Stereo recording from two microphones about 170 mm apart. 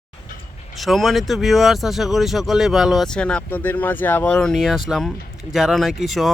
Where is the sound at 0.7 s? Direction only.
Centre (ahead or behind).